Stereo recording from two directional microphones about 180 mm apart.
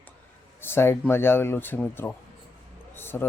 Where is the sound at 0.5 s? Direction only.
10° left (ahead or behind).